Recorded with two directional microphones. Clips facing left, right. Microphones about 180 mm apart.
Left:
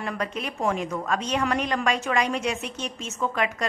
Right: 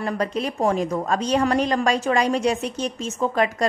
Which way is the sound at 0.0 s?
35° right (ahead or behind).